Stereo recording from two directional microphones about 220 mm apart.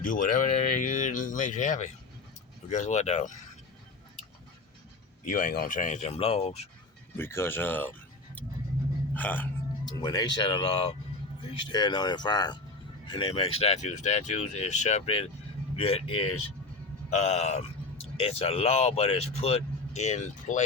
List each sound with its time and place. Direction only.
0.0 s speech: 35° left (ahead or behind)
5.3 s speech: 40° left (ahead or behind)
7.2 s speech: 10° left (ahead or behind)
9.1 s speech: 10° left (ahead or behind)
9.8 s speech: 20° left (ahead or behind)